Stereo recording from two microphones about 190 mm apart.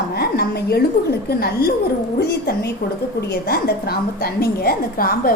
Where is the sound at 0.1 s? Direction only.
55° left (ahead or behind).